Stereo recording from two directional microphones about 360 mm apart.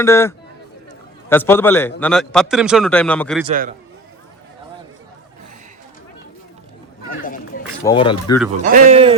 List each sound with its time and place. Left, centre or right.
0.0 s a man's voice: centre
3.4 s speech: right
7.1 s a sound: left
7.9 s speech: centre
8.6 s speech: right